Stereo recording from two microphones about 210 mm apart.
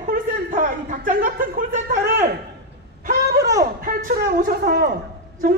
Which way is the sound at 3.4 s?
15° right (ahead or behind).